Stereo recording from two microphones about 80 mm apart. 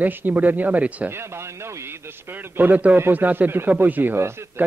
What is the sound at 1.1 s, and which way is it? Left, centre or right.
Speech, right.